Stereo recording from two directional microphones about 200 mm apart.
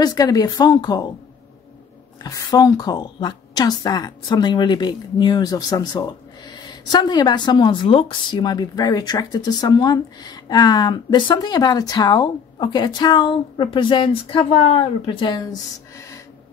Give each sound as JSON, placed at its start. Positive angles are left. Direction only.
{"t": 0.0, "sound": "a woman's voice", "side_deg": 20}
{"t": 2.2, "sound": "a woman's voice", "side_deg": 15}